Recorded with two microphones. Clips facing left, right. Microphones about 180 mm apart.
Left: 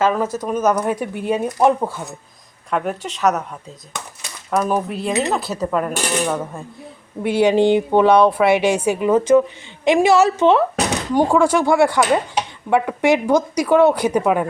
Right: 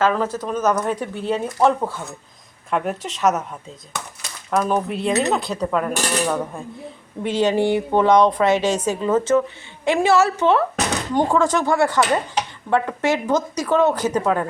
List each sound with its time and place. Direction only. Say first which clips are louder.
0.0 s speech: left 1 dB; 10° left (ahead or behind)
2.6 s speech: left 1 dB; centre (ahead or behind)
4.5 s speech: left 1 dB; centre (ahead or behind)
7.2 s speech: left 4 dB; 10° left (ahead or behind)